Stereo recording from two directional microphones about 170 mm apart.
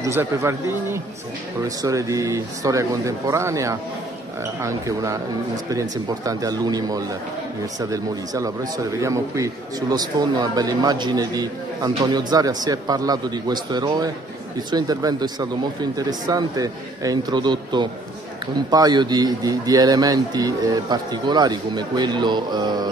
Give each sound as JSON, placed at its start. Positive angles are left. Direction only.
{"t": 0.0, "sound": "a man's voice", "side_deg": -15}